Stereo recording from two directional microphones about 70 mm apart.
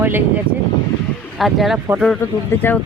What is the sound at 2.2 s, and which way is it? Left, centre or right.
Speech, left.